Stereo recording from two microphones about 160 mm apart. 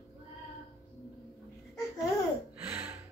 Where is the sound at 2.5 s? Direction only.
10° right (ahead or behind).